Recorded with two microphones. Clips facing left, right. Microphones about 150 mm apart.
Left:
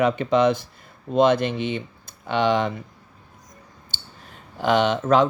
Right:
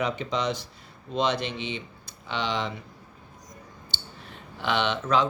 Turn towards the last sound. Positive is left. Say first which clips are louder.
# left 6 dB
turn(degrees=45)  # may be behind; listen again after turning